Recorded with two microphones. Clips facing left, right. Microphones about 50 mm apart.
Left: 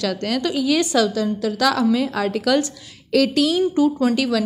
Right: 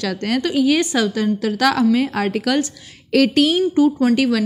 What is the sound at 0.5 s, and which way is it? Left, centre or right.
Speech, right.